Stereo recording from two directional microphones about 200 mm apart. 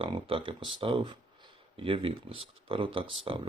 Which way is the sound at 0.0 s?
25° right (ahead or behind).